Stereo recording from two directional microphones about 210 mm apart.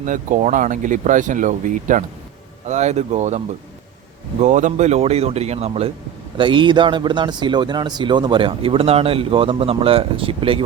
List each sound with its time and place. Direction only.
0.0 s a man's voice: 35° right (ahead or behind)